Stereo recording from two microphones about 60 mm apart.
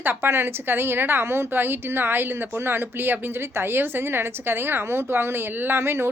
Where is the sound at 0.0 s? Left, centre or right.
Right.